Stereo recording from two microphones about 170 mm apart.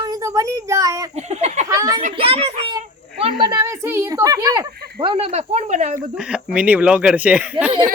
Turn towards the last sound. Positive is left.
turn(degrees=-5)  # may be behind; listen again after turning